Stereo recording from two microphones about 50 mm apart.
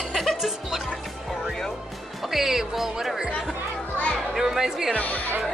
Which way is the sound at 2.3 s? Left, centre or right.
Centre.